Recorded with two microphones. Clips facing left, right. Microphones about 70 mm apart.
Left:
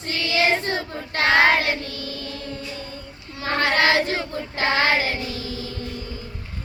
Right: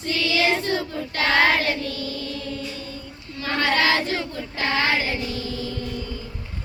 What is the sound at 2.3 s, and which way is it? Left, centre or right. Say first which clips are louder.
Music: right 2 dB; left.